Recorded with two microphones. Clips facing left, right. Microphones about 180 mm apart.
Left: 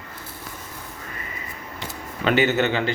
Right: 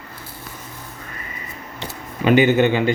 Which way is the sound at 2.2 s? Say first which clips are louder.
Right 5 dB; 15° right (ahead or behind).